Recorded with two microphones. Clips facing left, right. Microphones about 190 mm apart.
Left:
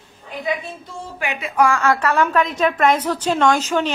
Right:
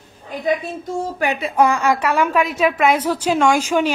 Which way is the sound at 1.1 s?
40° right (ahead or behind).